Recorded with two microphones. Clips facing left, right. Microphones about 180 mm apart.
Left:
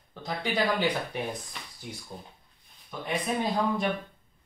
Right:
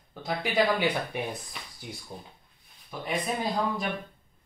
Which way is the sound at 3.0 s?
Centre (ahead or behind).